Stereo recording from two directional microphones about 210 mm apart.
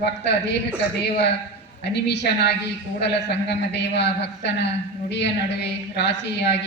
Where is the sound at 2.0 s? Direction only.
55° left (ahead or behind).